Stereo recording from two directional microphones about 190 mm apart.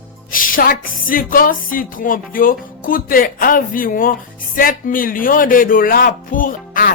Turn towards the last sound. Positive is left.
turn(degrees=45)  # may be behind; listen again after turning